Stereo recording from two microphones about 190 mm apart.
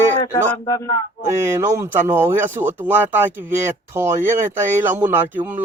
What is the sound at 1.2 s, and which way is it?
Speech, 15° right (ahead or behind).